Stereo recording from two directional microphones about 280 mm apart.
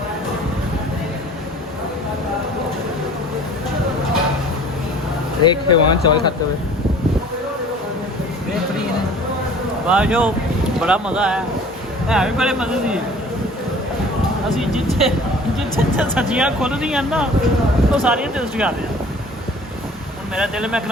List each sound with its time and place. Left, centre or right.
5.4 s speech: centre
9.8 s speech: centre
14.5 s speech: centre
15.5 s music: centre
16.1 s speech: centre
20.3 s speech: centre